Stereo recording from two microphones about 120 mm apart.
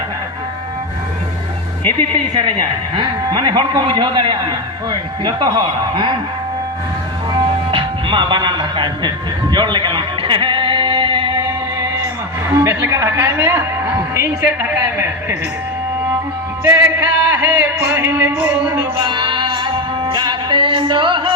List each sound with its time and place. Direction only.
1.9 s speech: 45° right (ahead or behind)
7.3 s music: 45° right (ahead or behind)
12.5 s a woman's voice: 20° right (ahead or behind)
16.6 s a woman's voice: 20° right (ahead or behind)
18.9 s music: 45° right (ahead or behind)